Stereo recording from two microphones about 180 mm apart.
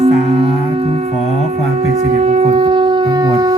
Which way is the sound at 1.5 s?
40° right (ahead or behind).